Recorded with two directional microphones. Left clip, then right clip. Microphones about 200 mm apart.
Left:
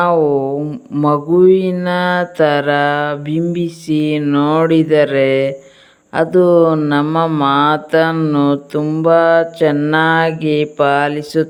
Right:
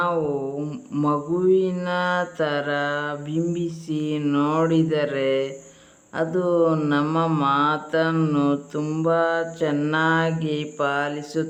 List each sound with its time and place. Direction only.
0.9 s mantra: 35° left (ahead or behind)